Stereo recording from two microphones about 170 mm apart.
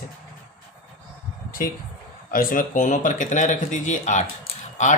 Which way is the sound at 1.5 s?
55° left (ahead or behind).